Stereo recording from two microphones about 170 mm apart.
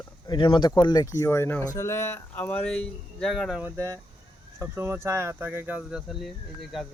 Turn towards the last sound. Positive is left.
turn(degrees=0)  # may be behind; listen again after turning